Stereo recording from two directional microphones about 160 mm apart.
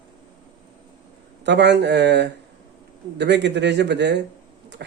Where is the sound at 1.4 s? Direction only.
90° right.